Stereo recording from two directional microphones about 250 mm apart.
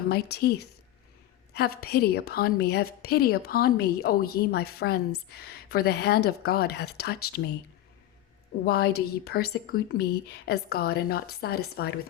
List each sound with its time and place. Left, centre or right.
0.1 s a woman's voice: left
8.6 s a woman's voice: left